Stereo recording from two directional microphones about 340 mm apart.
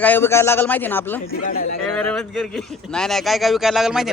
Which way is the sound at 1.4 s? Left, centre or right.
Left.